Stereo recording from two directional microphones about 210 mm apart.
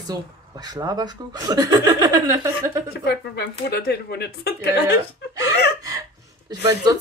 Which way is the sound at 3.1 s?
50° left (ahead or behind).